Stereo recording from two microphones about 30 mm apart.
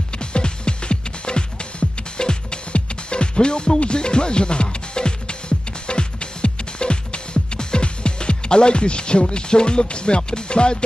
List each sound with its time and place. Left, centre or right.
0.2 s music: left